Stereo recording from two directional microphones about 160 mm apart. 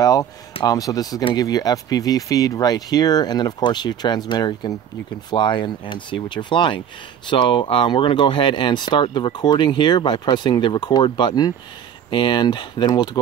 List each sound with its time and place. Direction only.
0.0 s speech: 20° left (ahead or behind)